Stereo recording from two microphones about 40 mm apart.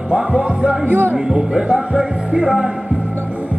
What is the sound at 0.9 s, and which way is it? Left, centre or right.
Music, right.